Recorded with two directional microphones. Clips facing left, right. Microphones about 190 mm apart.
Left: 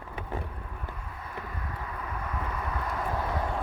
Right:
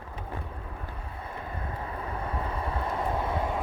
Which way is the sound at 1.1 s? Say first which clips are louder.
Right 4 dB; 30° right (ahead or behind).